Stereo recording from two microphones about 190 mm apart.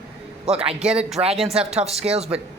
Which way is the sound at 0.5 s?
30° right (ahead or behind).